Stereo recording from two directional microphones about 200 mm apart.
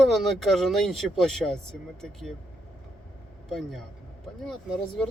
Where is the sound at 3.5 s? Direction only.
Centre (ahead or behind).